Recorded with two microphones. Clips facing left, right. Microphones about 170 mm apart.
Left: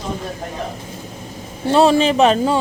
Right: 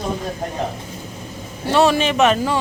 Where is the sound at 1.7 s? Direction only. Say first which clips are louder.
Left 3 dB; 30° left (ahead or behind).